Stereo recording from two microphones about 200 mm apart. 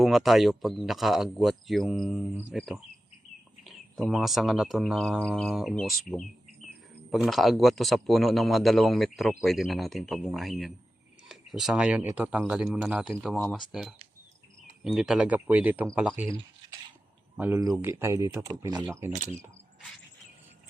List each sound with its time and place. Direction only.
0.0 s speech: centre (ahead or behind)
17.3 s speech: 10° right (ahead or behind)
19.1 s cricket: 35° right (ahead or behind)